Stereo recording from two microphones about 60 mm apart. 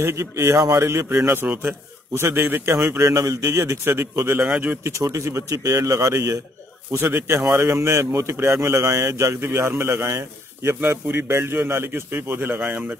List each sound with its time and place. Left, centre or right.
0.0 s a man's voice: right
1.1 s a man's voice: right
3.0 s a man's voice: right
4.8 s a man's voice: right
6.9 s a man's voice: right
9.4 s a man's voice: right
10.8 s a man's voice: right